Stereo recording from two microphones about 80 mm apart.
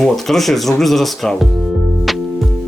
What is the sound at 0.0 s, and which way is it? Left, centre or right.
Speech, centre.